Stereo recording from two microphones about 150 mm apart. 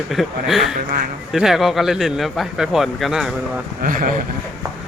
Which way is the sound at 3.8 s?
65° right (ahead or behind).